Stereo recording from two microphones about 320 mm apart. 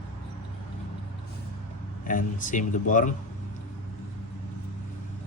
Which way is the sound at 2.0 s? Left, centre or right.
Left.